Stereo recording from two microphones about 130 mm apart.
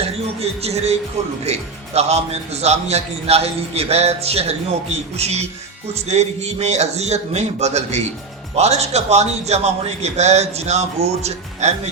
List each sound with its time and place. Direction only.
0.0 s a man's voice: 55° right (ahead or behind)